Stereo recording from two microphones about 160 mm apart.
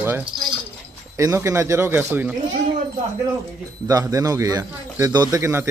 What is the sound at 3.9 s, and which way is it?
Speech, 20° right (ahead or behind).